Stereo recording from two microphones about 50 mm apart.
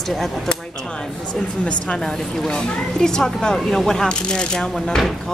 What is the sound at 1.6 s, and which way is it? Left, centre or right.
Speech, centre.